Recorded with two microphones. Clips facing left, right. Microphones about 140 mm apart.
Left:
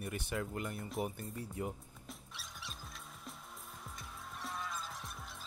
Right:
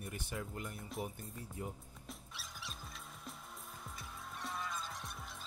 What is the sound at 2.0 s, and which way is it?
Music, centre (ahead or behind).